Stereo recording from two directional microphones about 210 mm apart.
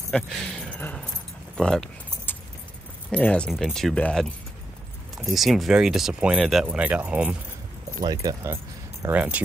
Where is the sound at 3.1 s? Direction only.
5° left (ahead or behind).